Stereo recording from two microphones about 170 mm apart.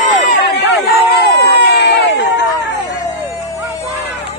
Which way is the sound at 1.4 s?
80° left.